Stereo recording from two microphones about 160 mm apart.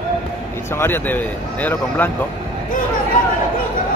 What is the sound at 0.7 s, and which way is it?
A man's voice, 15° left (ahead or behind).